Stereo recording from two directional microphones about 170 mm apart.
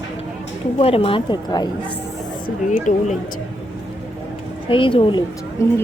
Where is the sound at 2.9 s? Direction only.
45° left (ahead or behind).